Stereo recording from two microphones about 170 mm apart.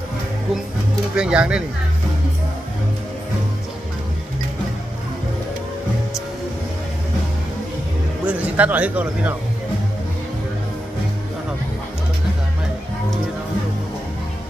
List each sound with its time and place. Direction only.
1.1 s speech: 5° right (ahead or behind)
8.3 s speech: 10° right (ahead or behind)